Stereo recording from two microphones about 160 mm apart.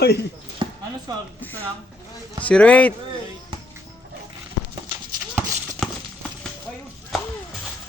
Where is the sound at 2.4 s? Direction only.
10° left (ahead or behind).